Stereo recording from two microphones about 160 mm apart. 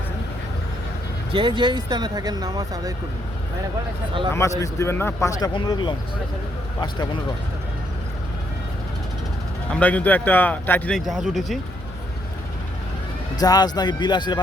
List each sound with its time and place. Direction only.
1.3 s speech: 30° right (ahead or behind)
4.3 s speech: 20° left (ahead or behind)
5.5 s speech: 30° left (ahead or behind)
9.7 s speech: 10° left (ahead or behind)
13.3 s speech: 25° left (ahead or behind)